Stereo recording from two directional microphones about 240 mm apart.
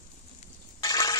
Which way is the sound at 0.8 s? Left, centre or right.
Centre.